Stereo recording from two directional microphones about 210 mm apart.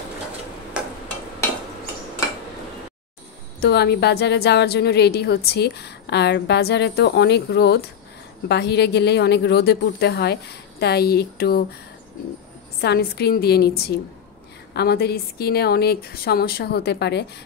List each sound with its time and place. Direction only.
3.6 s a woman's voice: 50° left (ahead or behind)
12.8 s a woman's voice: 50° left (ahead or behind)